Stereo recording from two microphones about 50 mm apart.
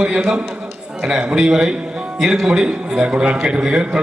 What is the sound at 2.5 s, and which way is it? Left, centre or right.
A man's voice, centre.